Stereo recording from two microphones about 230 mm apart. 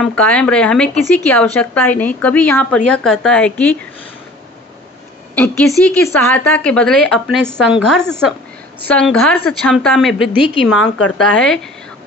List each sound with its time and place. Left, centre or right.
0.0 s speech: centre
5.3 s a woman's voice: centre
10.7 s speech: left
11.3 s speech: centre